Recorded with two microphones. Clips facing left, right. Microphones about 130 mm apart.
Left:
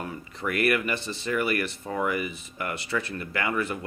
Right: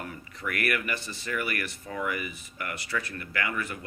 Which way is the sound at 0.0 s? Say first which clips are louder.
Left 4 dB; 25° left (ahead or behind).